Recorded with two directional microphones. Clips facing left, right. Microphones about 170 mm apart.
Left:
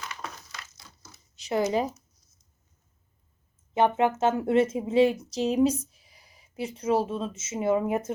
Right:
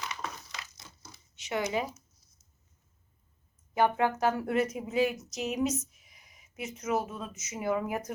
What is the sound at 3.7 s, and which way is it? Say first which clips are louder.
Speech: left 4 dB; 25° left (ahead or behind).